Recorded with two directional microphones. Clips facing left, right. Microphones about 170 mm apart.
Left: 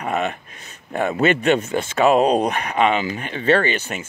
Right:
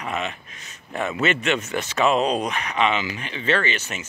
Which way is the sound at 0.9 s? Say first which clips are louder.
Left 5 dB; 35° left (ahead or behind).